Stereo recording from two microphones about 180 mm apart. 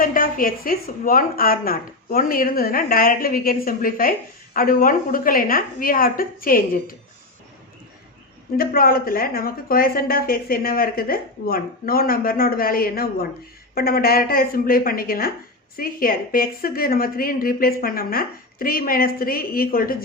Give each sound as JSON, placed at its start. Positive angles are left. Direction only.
{"t": 0.0, "sound": "a woman's voice", "side_deg": 50}
{"t": 8.5, "sound": "speech", "side_deg": 55}